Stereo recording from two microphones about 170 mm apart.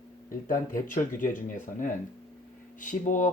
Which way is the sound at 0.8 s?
50° left (ahead or behind).